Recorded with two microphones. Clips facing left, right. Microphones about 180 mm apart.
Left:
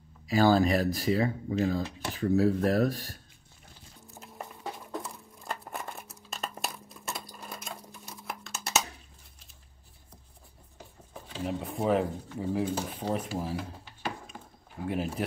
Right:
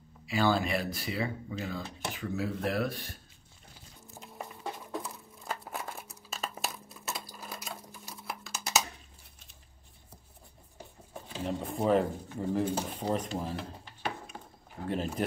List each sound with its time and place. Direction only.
0.3 s speech: 40° left (ahead or behind)
4.1 s a sound: centre (ahead or behind)
11.4 s speech: centre (ahead or behind)
14.8 s speech: 5° left (ahead or behind)